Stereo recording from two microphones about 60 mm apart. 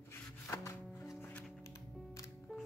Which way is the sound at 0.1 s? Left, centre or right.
Left.